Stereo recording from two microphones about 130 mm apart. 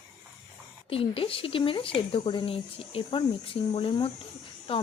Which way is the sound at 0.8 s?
45° left (ahead or behind).